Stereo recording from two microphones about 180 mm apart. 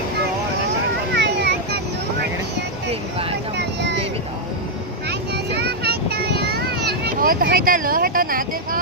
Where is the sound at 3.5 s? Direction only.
70° right (ahead or behind).